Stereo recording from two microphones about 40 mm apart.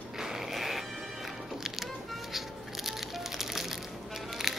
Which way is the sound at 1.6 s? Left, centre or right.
Centre.